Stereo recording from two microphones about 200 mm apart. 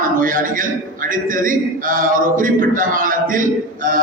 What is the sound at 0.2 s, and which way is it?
A man's voice, 45° right (ahead or behind).